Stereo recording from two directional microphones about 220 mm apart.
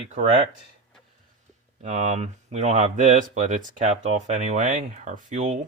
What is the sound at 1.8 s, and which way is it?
Speech, 35° right (ahead or behind).